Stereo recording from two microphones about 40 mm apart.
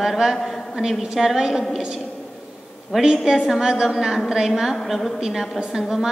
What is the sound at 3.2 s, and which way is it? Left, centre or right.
A woman's voice, centre.